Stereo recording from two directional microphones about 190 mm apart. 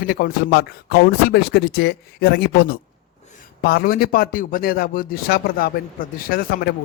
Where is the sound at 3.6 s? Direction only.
50° left (ahead or behind).